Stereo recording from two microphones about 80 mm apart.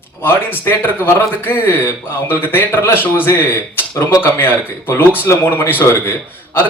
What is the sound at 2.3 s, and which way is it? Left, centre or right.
Speech, left.